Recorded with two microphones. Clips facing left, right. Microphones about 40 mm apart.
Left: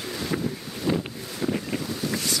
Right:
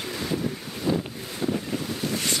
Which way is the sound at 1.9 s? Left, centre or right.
Right.